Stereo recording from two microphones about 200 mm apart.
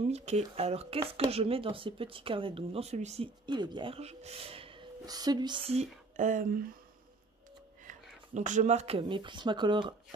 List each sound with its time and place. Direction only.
0.1 s speech: 35° right (ahead or behind)
3.4 s speech: 20° right (ahead or behind); by 6.7 s 45° right (ahead or behind)
8.4 s speech: 35° right (ahead or behind)